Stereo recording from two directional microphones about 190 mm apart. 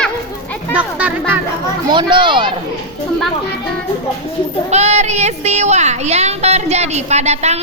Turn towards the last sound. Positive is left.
turn(degrees=-35)  # may be behind; listen again after turning